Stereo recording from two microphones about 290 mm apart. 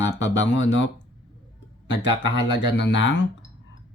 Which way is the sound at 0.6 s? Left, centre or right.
Left.